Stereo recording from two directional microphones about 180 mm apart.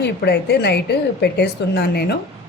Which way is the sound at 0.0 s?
65° left (ahead or behind).